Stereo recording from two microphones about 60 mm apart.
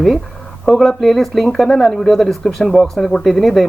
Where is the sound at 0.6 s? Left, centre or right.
Centre.